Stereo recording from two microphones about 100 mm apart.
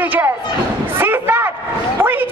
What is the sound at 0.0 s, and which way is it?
Speech, 20° right (ahead or behind).